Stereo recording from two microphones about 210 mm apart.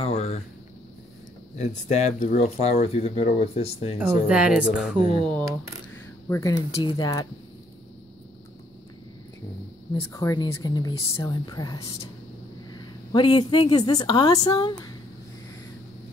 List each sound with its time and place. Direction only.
0.0 s a sound: 30° left (ahead or behind)
1.6 s speech: 35° left (ahead or behind)
4.3 s speech: 5° right (ahead or behind)
6.2 s speech: 15° left (ahead or behind)
10.1 s a woman's voice: 15° left (ahead or behind)